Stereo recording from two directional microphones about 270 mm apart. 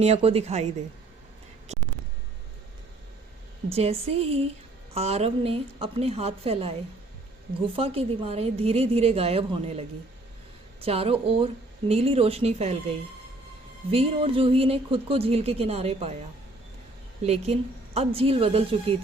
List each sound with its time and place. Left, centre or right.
0.0 s a woman's voice: right
1.7 s a sound: right
3.7 s a woman's voice: right
13.9 s a woman's voice: right
17.2 s a woman's voice: right